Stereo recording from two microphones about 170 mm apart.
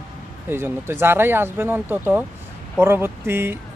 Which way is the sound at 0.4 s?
15° right (ahead or behind).